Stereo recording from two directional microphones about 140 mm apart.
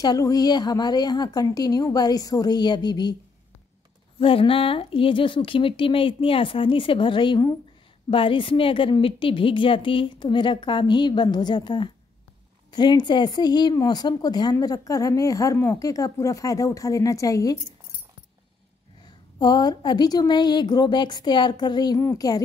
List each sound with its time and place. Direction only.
0.0 s speech: 25° left (ahead or behind)
4.2 s a woman's voice: 40° left (ahead or behind); by 17.6 s 25° left (ahead or behind)
19.3 s a woman's voice: 30° left (ahead or behind)